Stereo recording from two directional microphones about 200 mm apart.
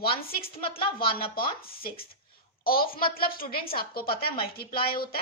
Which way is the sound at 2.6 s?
50° left (ahead or behind).